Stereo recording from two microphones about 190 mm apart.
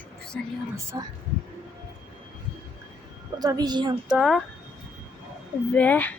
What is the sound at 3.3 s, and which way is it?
Speech, 20° right (ahead or behind).